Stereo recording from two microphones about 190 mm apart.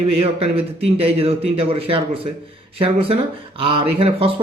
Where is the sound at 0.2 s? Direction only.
30° right (ahead or behind).